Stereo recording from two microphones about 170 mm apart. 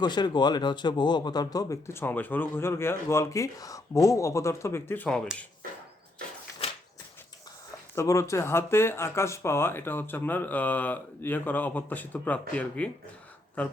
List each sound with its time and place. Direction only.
0.0 s speech: 25° left (ahead or behind); by 5.5 s 5° left (ahead or behind)
7.9 s speech: 15° left (ahead or behind)